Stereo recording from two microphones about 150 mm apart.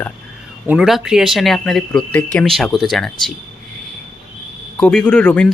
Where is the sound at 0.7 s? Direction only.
5° right (ahead or behind).